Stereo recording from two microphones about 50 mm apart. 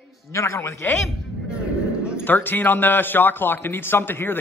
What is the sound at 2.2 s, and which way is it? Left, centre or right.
A man's voice, left.